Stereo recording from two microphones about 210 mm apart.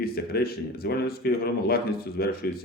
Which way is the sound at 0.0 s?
45° left (ahead or behind).